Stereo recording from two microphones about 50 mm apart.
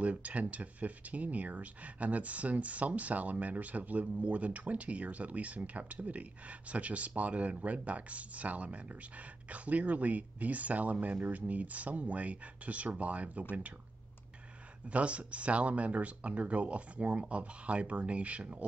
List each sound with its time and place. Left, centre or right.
0.0 s speech: right
14.9 s speech: right